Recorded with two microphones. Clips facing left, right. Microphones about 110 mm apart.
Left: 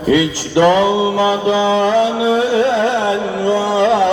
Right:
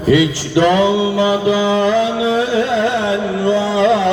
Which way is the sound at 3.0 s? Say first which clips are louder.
Even; 30° left (ahead or behind).